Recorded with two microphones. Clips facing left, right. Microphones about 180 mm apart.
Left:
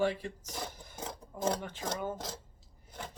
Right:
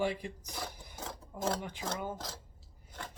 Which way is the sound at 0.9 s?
15° left (ahead or behind).